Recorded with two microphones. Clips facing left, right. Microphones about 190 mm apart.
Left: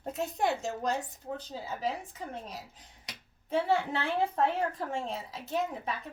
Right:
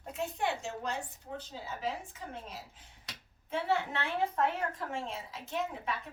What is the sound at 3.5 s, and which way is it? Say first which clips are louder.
A woman's voice: left 4 dB; 35° left (ahead or behind).